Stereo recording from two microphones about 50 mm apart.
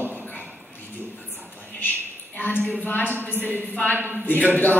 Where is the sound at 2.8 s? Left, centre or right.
Left.